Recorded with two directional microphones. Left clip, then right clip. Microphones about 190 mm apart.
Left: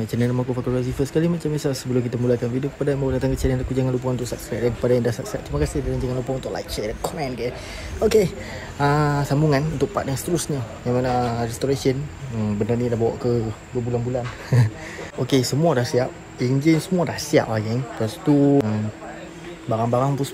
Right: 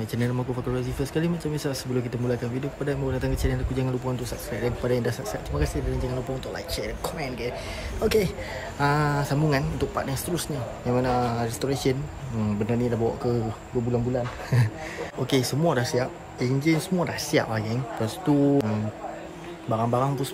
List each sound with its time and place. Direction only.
0.0 s speech: 10° right (ahead or behind)
14.5 s speech: 15° right (ahead or behind)
19.7 s speech: 15° right (ahead or behind)